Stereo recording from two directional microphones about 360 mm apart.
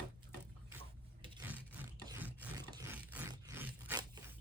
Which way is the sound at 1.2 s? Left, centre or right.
Centre.